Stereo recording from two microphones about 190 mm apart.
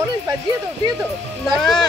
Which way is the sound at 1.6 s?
Centre (ahead or behind).